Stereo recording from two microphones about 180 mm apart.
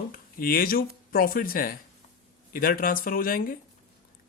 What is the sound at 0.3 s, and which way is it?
Speech, 55° left (ahead or behind).